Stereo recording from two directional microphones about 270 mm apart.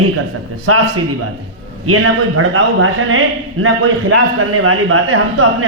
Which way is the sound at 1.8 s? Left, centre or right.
Right.